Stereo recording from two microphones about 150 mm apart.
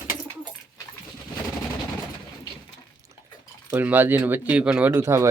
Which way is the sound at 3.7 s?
10° right (ahead or behind).